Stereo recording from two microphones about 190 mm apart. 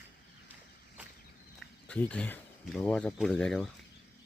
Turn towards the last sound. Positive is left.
turn(degrees=5)  # may be behind; listen again after turning